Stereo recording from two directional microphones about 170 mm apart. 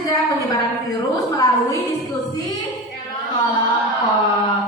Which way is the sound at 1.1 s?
20° left (ahead or behind).